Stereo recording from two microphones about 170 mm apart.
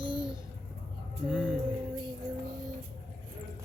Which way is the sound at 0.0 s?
30° right (ahead or behind).